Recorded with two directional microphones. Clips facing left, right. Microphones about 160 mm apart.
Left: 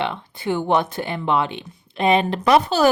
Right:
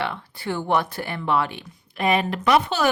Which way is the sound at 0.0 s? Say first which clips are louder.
Left 3 dB; 20° left (ahead or behind).